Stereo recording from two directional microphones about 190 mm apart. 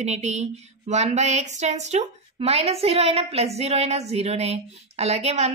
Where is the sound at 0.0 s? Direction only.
35° right (ahead or behind).